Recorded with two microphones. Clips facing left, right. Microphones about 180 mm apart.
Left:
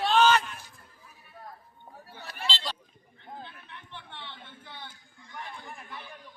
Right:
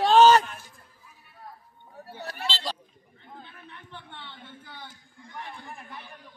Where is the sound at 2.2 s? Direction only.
40° right (ahead or behind).